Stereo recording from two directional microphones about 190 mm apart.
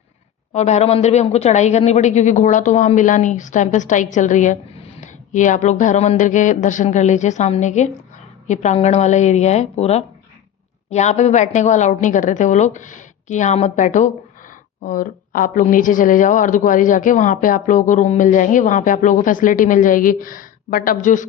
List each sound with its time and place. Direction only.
0.5 s speech: 35° left (ahead or behind)